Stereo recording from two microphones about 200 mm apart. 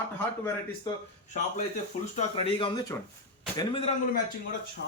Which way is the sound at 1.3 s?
35° left (ahead or behind).